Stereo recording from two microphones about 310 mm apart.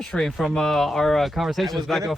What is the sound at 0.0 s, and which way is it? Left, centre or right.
Speech, centre.